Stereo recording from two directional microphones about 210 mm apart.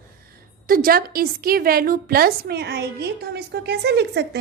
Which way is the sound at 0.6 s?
45° right (ahead or behind).